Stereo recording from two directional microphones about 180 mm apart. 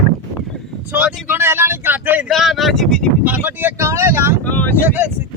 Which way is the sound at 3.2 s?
10° right (ahead or behind).